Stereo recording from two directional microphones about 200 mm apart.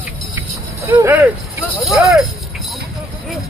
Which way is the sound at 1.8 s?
Centre (ahead or behind).